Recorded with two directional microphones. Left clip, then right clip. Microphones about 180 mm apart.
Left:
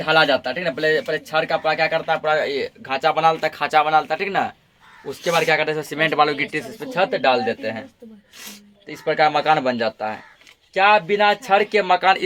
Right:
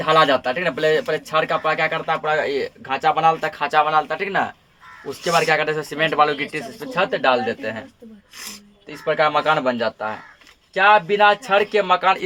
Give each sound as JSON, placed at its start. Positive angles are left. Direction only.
{"t": 0.0, "sound": "speech", "side_deg": -25}
{"t": 2.9, "sound": "speech", "side_deg": 0}
{"t": 5.2, "sound": "speech", "side_deg": 5}
{"t": 8.9, "sound": "speech", "side_deg": 25}